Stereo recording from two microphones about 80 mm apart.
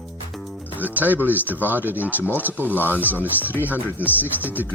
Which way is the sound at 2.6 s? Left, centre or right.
Left.